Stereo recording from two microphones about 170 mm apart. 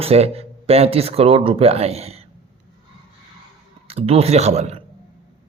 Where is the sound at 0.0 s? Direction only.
35° right (ahead or behind).